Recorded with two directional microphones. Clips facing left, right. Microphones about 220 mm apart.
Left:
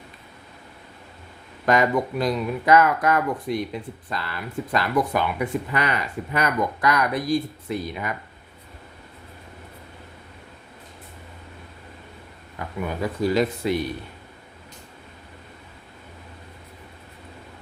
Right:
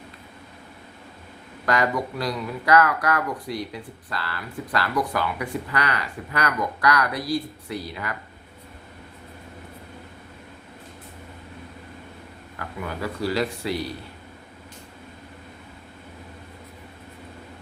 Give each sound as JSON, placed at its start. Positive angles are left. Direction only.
{"t": 1.6, "sound": "speech", "side_deg": 20}
{"t": 12.5, "sound": "speech", "side_deg": 20}